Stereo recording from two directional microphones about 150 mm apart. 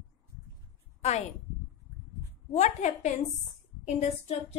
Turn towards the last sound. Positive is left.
turn(degrees=50)  # may be behind; listen again after turning